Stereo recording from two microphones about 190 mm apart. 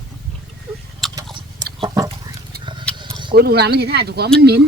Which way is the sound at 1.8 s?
20° right (ahead or behind).